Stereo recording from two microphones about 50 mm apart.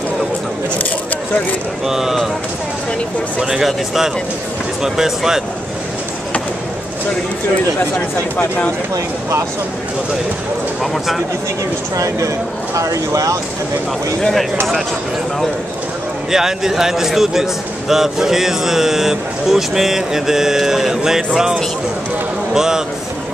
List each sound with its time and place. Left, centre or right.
1.9 s a man's voice: centre
3.3 s a man's voice: centre
12.7 s speech: right
16.3 s a man's voice: centre